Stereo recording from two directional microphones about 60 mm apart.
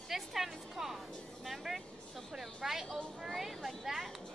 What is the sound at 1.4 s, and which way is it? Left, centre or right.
Vehicle, centre.